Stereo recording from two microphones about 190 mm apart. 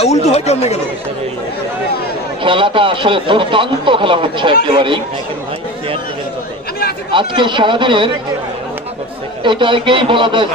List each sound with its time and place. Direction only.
0.0 s speech: 35° left (ahead or behind)
2.4 s speech: 25° right (ahead or behind)
7.1 s speech: 25° right (ahead or behind)
9.4 s speech: 25° right (ahead or behind)